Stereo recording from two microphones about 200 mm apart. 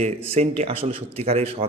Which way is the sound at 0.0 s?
30° right (ahead or behind).